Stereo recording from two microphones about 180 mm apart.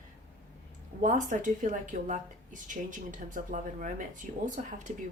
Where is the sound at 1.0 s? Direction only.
45° right (ahead or behind).